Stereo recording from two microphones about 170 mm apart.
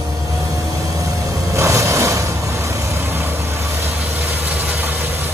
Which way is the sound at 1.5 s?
15° right (ahead or behind).